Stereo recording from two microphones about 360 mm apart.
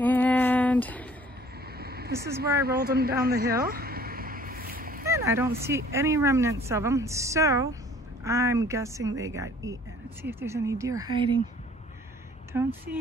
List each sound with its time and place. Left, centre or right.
0.0 s female singing: centre
1.8 s a sound: right
5.1 s a woman's voice: centre
12.5 s a woman's voice: centre